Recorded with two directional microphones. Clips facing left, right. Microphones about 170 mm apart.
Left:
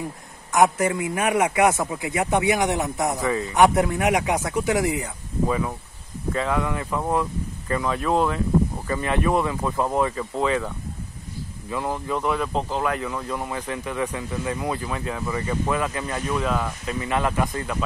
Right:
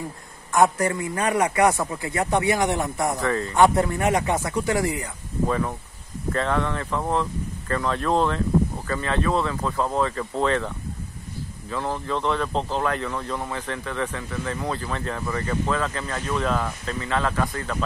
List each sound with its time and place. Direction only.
0.5 s speech: 20° left (ahead or behind)
5.5 s speech: 5° left (ahead or behind)
11.7 s speech: 10° left (ahead or behind)
17.0 s speech: 15° left (ahead or behind)